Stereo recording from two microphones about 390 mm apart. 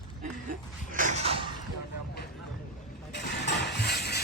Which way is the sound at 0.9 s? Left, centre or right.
Centre.